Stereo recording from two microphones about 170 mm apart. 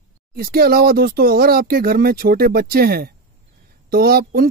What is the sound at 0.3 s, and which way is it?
Speech, 65° right (ahead or behind).